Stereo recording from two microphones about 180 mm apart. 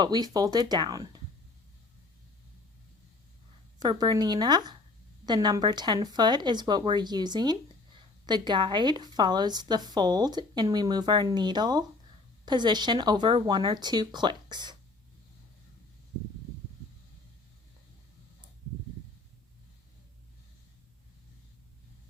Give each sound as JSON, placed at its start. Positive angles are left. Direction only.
{"t": 0.0, "sound": "a woman's voice", "side_deg": -20}
{"t": 3.8, "sound": "a woman's voice", "side_deg": -25}